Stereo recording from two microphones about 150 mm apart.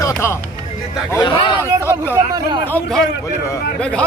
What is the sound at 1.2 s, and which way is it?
Speech, 30° left (ahead or behind).